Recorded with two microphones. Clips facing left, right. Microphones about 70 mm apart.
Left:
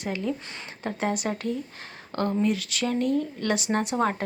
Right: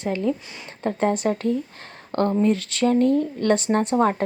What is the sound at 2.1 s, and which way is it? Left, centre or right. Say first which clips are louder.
Speech: right 5 dB; right.